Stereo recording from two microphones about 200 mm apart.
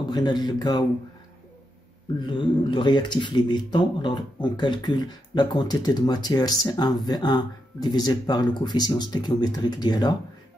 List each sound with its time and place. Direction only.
0.1 s speech: 20° left (ahead or behind)
2.2 s speech: 25° left (ahead or behind)